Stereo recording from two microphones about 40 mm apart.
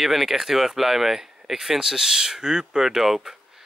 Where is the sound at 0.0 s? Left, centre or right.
Centre.